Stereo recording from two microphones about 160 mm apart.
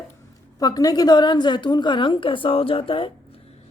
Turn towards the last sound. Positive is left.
turn(degrees=35)  # may be behind; listen again after turning